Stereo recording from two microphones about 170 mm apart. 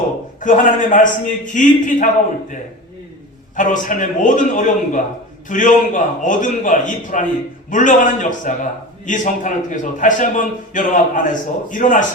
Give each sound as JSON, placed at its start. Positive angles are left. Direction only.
{"t": 0.3, "sound": "a man's voice", "side_deg": 50}
{"t": 3.5, "sound": "a man's voice", "side_deg": 50}